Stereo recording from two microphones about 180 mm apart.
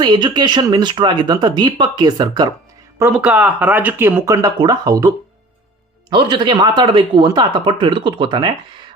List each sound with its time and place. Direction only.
0.0 s speech: 25° right (ahead or behind)
3.0 s speech: 5° right (ahead or behind); by 8.8 s 25° right (ahead or behind)